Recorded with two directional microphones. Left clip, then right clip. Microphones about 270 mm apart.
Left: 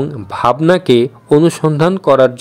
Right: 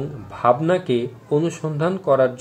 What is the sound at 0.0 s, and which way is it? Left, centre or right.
A man's voice, left.